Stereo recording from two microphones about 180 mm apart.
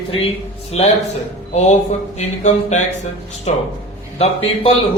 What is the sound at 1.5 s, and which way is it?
Speech, 40° left (ahead or behind).